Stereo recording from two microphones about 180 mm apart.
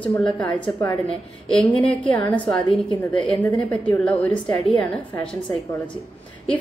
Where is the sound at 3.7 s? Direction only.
5° left (ahead or behind).